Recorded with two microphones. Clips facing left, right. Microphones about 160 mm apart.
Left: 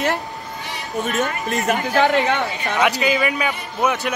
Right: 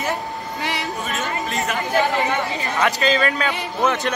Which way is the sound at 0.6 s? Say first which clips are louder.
Right 9 dB; 90° right.